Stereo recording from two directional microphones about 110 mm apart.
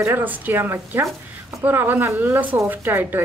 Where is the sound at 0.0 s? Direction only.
20° right (ahead or behind).